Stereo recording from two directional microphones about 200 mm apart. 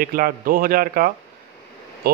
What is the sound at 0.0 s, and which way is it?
A man's voice, 45° right (ahead or behind).